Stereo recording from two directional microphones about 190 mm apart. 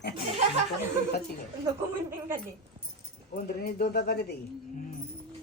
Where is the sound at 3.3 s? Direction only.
50° left (ahead or behind).